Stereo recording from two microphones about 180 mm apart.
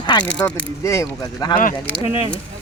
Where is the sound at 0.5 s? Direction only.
15° left (ahead or behind).